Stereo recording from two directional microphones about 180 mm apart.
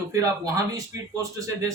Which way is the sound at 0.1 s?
20° right (ahead or behind).